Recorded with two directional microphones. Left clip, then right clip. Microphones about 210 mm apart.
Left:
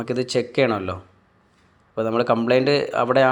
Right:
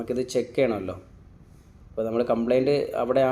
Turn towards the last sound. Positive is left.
turn(degrees=10)  # may be behind; listen again after turning